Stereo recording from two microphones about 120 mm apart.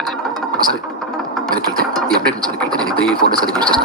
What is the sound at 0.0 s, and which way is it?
Music, 5° left (ahead or behind).